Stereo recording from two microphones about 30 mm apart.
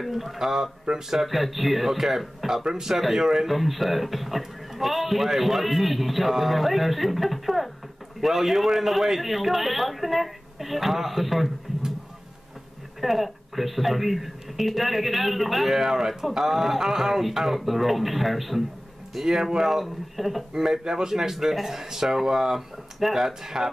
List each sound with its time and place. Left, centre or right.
0.1 s a man's voice: centre
0.4 s speech: centre
1.1 s a man's voice: centre
3.0 s a man's voice: centre
13.0 s a man's voice: centre
15.7 s a man's voice: centre
20.5 s speech: centre